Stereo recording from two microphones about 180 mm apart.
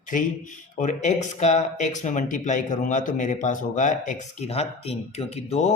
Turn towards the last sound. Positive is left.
turn(degrees=35)  # may be behind; listen again after turning